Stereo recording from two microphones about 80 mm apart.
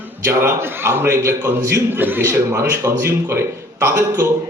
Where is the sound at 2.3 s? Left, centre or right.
Right.